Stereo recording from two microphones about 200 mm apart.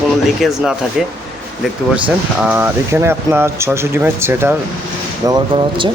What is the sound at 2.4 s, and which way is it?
Speech, 10° right (ahead or behind).